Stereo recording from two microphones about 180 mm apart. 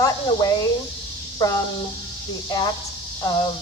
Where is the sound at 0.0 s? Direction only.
20° left (ahead or behind).